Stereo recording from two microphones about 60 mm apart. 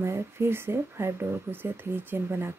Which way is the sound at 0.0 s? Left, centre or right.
Right.